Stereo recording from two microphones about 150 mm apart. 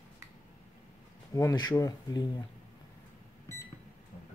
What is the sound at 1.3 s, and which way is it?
Speech, 25° left (ahead or behind).